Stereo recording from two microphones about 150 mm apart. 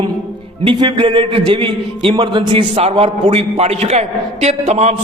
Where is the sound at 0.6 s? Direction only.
30° right (ahead or behind).